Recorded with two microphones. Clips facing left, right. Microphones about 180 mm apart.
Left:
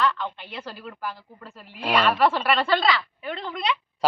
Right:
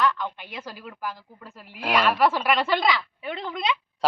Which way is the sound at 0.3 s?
10° right (ahead or behind).